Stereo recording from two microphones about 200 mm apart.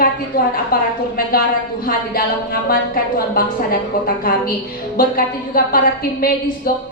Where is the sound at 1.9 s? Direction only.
50° left (ahead or behind).